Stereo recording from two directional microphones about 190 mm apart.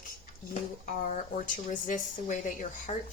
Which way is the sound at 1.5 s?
45° left (ahead or behind).